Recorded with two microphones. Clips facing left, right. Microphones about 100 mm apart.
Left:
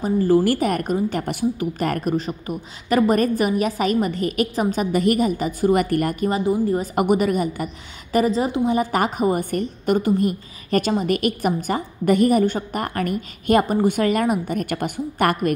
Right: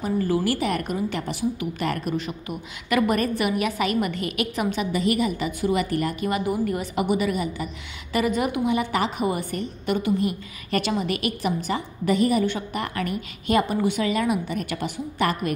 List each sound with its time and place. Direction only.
0.0 s a woman's voice: 40° left (ahead or behind)
6.2 s a woman's voice: 30° left (ahead or behind)
7.0 s a woman's voice: 50° left (ahead or behind)